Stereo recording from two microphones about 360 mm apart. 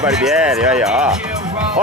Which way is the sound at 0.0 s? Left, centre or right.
Centre.